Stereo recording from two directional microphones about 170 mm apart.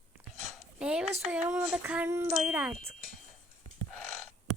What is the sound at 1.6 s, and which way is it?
Speech, 5° right (ahead or behind).